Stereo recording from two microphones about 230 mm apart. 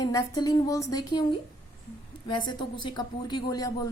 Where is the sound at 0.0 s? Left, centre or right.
Centre.